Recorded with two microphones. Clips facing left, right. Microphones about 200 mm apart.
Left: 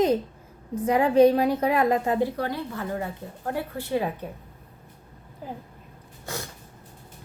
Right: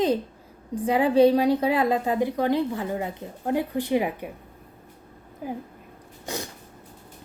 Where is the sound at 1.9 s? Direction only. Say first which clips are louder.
Even; 15° right (ahead or behind).